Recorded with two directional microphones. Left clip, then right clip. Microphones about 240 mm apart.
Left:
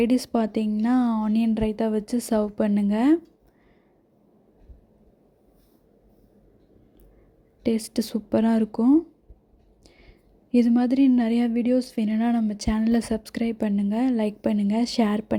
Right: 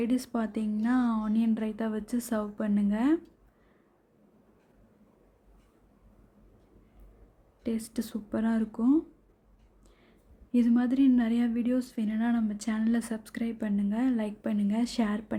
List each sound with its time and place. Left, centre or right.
0.0 s speech: left
7.6 s speech: left
10.5 s speech: left